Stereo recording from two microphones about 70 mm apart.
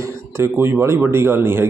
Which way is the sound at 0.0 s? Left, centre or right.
Right.